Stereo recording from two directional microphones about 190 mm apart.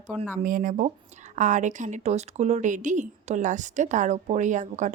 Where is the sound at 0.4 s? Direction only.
45° right (ahead or behind).